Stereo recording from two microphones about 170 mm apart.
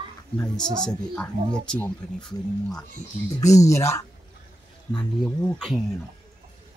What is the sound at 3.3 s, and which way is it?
Speech, 20° left (ahead or behind).